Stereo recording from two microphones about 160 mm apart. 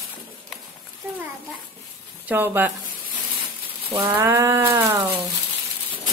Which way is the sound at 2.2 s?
10° right (ahead or behind).